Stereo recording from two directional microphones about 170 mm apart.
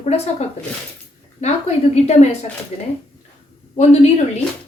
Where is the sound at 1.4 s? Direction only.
40° left (ahead or behind).